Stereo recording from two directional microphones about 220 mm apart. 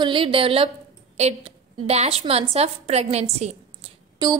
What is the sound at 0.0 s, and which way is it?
A woman's voice, 25° right (ahead or behind).